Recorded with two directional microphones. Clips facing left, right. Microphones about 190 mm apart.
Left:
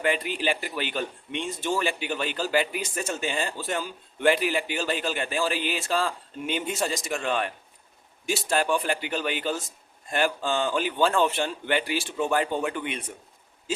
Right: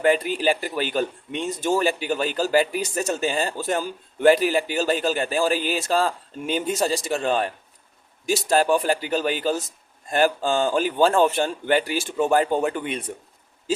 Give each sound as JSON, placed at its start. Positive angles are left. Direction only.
{"t": 0.0, "sound": "a man's voice", "side_deg": -40}